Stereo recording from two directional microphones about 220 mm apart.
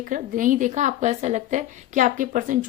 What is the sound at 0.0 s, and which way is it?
A woman's voice, 35° right (ahead or behind).